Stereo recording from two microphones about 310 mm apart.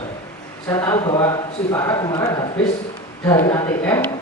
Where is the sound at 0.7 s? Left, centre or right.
Centre.